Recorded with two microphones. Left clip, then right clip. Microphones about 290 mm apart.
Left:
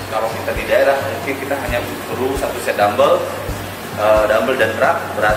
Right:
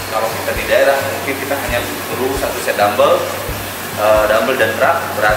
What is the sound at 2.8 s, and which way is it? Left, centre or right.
Speech, left.